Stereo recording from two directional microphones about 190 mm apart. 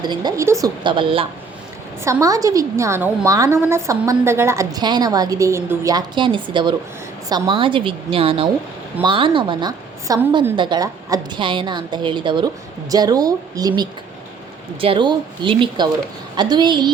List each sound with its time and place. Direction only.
0.0 s a woman's voice: 20° right (ahead or behind)
2.0 s a woman's voice: 15° right (ahead or behind)